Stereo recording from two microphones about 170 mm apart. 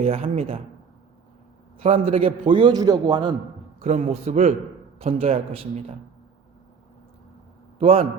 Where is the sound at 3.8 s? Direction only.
40° right (ahead or behind).